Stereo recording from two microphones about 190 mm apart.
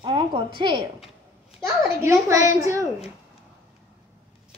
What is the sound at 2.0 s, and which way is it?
Speech, 15° right (ahead or behind).